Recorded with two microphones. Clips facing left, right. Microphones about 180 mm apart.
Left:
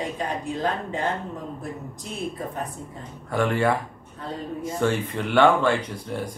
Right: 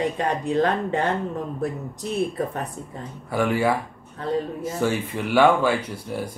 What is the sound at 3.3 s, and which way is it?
Speech, 5° right (ahead or behind).